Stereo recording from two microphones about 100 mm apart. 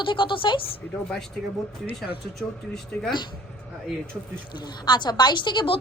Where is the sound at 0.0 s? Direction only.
55° left (ahead or behind).